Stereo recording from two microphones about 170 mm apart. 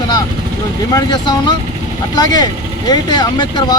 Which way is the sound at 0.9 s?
25° left (ahead or behind).